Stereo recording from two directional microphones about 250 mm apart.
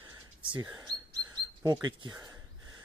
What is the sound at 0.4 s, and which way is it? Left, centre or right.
Speech, centre.